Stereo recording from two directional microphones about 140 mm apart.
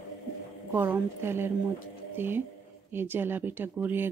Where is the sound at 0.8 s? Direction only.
20° right (ahead or behind).